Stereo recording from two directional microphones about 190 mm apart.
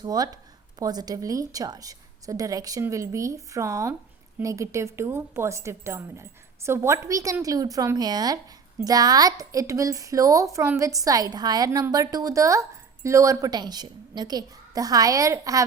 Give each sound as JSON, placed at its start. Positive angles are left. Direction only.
{"t": 0.0, "sound": "a woman's voice", "side_deg": -20}